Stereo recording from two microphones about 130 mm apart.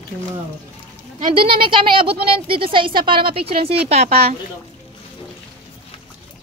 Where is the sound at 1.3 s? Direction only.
40° right (ahead or behind).